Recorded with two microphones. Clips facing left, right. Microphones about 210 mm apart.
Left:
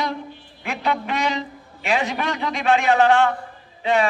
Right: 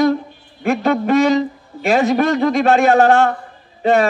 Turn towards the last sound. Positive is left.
turn(degrees=-45)  # may be behind; listen again after turning